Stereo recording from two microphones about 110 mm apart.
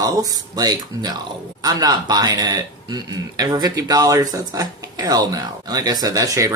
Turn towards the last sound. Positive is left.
turn(degrees=-30)  # may be behind; listen again after turning